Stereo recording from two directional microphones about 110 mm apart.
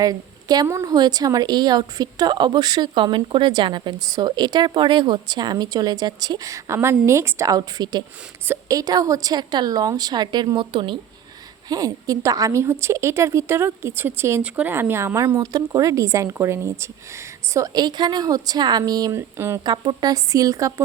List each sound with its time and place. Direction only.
0.0 s a woman's voice: 35° right (ahead or behind); by 10.9 s 50° right (ahead or behind)
11.7 s a woman's voice: 35° right (ahead or behind)
17.5 s speech: 35° right (ahead or behind)